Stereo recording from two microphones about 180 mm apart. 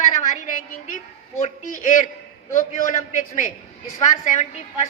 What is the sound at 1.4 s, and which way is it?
A man's voice, 45° left (ahead or behind).